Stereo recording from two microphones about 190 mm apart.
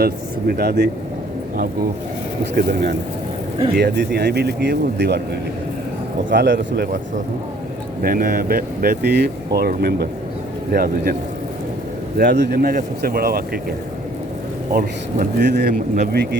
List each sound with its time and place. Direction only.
0.0 s speech: 55° right (ahead or behind)
2.4 s speech: 55° right (ahead or behind)
6.3 s speech: 70° right (ahead or behind)
8.0 s speech: 50° right (ahead or behind)
12.1 s speech: 65° right (ahead or behind)